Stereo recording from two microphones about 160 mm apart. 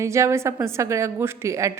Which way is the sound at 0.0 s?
15° right (ahead or behind).